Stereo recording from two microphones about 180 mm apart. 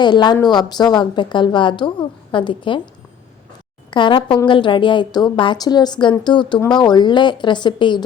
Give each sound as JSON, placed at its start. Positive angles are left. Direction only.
{"t": 0.0, "sound": "a woman's voice", "side_deg": 25}
{"t": 3.9, "sound": "a woman's voice", "side_deg": 25}